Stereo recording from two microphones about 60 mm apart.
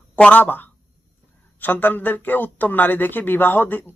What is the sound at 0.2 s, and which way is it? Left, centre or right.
Speech, left.